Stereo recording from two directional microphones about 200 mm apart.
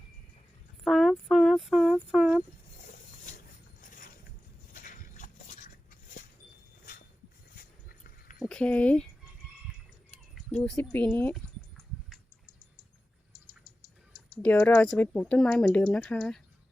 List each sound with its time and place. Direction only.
0.9 s a sound: centre (ahead or behind)
4.7 s a sound: 40° left (ahead or behind)
7.5 s dog: 45° left (ahead or behind)
8.4 s speech: 5° left (ahead or behind)
10.6 s speech: 10° left (ahead or behind)
14.4 s speech: 10° left (ahead or behind)